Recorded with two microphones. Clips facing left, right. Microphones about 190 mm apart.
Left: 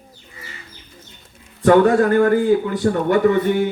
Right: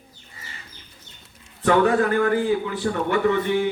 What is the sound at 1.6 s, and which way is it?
A man's voice, 40° left (ahead or behind).